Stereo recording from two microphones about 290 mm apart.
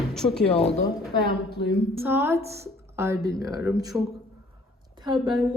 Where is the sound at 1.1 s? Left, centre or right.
Centre.